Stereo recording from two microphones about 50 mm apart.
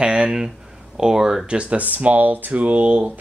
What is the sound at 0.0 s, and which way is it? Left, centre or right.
Speech, centre.